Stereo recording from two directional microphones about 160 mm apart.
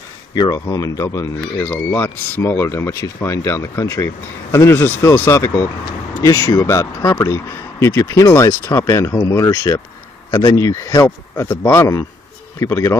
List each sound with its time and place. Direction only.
0.3 s speech: 25° left (ahead or behind)